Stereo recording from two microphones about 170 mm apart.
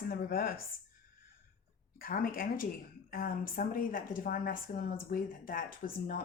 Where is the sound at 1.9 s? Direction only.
60° left (ahead or behind).